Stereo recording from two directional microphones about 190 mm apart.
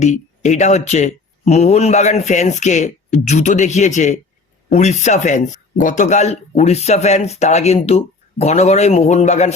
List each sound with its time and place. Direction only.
0.0 s speech: 40° left (ahead or behind)